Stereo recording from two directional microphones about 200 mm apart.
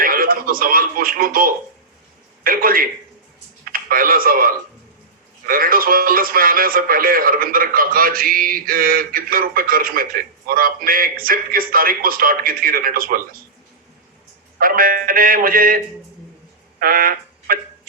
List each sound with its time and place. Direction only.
0.0 s speech: 45° right (ahead or behind)
14.6 s speech: 45° right (ahead or behind)
16.8 s speech: 45° right (ahead or behind)